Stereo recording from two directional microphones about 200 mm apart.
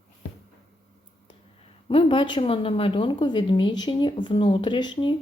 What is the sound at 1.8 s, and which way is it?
A woman's voice, 25° left (ahead or behind).